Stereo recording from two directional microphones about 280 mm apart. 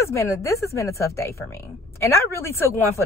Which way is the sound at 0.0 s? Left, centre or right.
Centre.